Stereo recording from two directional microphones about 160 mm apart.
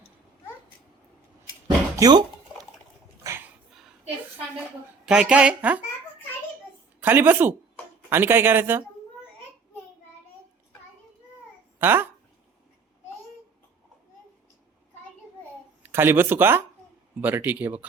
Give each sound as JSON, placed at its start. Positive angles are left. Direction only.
{"t": 1.6, "sound": "a sound", "side_deg": -25}
{"t": 3.2, "sound": "dog", "side_deg": -15}
{"t": 3.7, "sound": "a sound", "side_deg": 0}
{"t": 5.0, "sound": "speech", "side_deg": -5}
{"t": 7.0, "sound": "speech", "side_deg": -10}
{"t": 11.8, "sound": "a child's voice", "side_deg": -15}
{"t": 15.8, "sound": "speech", "side_deg": -15}